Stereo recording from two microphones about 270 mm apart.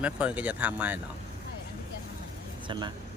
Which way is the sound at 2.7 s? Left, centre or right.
Centre.